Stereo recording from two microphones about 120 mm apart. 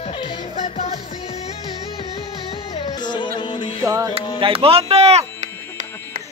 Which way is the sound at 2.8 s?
40° left (ahead or behind).